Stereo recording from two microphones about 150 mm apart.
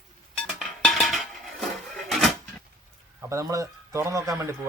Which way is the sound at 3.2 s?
20° right (ahead or behind).